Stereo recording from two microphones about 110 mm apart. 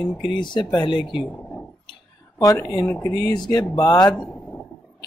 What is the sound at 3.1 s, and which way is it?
Speech, 35° left (ahead or behind).